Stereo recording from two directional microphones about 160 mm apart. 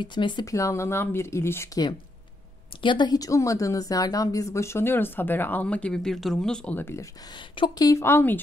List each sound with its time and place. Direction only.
0.0 s a woman's voice: 30° left (ahead or behind)
2.8 s a woman's voice: 30° left (ahead or behind)
7.3 s speech: 30° left (ahead or behind); by 8.4 s 15° left (ahead or behind)